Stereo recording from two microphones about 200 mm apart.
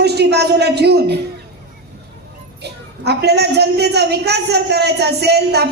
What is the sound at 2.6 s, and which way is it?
A woman's voice, 55° right (ahead or behind).